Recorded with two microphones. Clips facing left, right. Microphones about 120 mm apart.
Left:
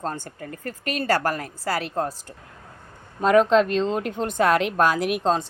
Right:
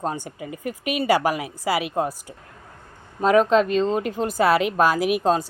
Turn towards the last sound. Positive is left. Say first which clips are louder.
# right 2 dB
turn(degrees=-5)  # may be behind; listen again after turning